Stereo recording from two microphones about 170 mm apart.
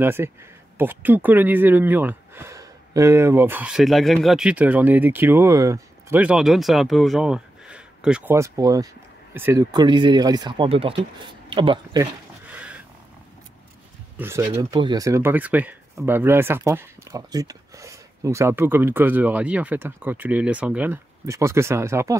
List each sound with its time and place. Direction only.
0.0 s speech: 15° right (ahead or behind); by 12.0 s 30° right (ahead or behind)
12.5 s wild animals: 5° right (ahead or behind)
14.1 s speech: 15° right (ahead or behind)